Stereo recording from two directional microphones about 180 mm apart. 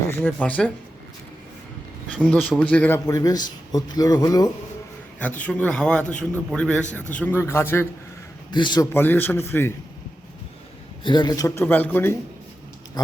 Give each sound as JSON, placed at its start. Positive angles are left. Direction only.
{"t": 0.1, "sound": "a man's voice", "side_deg": 10}
{"t": 2.3, "sound": "a man's voice", "side_deg": 5}
{"t": 5.4, "sound": "a man's voice", "side_deg": 5}
{"t": 8.5, "sound": "a man's voice", "side_deg": 25}
{"t": 8.9, "sound": "a man's voice", "side_deg": 10}
{"t": 11.0, "sound": "a man's voice", "side_deg": 25}